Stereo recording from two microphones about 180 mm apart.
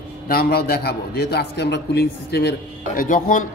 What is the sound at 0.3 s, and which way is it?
Speech, 60° left (ahead or behind).